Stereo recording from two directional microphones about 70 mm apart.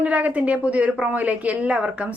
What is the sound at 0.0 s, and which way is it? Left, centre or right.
A woman's voice, right.